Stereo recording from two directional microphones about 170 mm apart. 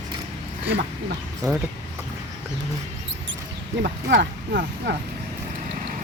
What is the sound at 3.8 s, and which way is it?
Speech, 80° right.